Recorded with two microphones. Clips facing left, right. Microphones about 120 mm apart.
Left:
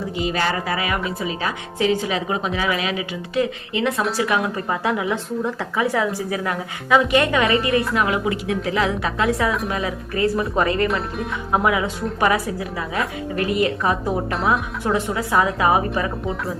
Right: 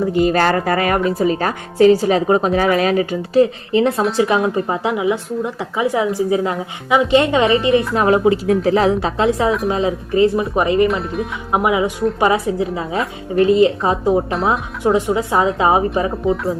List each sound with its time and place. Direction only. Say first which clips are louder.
0.0 s a woman's voice: right 8 dB; 50° right (ahead or behind); by 10.8 s 20° right (ahead or behind)
10.8 s speech: right 4 dB; centre (ahead or behind)
11.5 s a woman's voice: right 4 dB; 20° right (ahead or behind)